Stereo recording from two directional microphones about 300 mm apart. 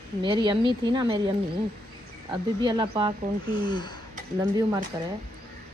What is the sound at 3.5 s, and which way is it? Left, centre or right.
Speech, centre.